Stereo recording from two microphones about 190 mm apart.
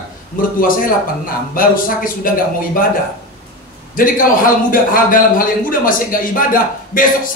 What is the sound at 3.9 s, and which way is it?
A man's voice, 45° left (ahead or behind).